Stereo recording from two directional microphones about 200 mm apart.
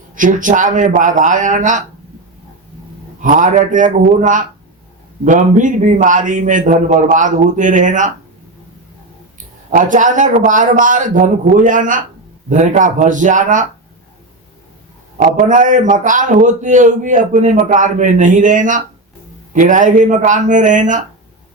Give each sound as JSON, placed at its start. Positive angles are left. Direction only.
{"t": 0.1, "sound": "a man's voice", "side_deg": -40}
{"t": 3.2, "sound": "a man's voice", "side_deg": -40}
{"t": 9.7, "sound": "a man's voice", "side_deg": -40}
{"t": 15.2, "sound": "a man's voice", "side_deg": -40}